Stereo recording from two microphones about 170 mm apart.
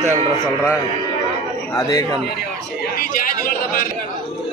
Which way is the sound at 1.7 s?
20° left (ahead or behind).